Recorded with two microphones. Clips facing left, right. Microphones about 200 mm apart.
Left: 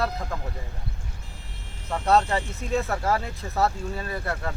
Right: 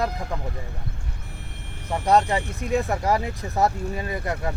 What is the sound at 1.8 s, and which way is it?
Speech, 15° right (ahead or behind).